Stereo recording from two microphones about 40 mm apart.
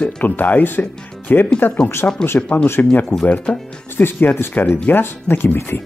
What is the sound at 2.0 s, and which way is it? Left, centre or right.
Speech, left.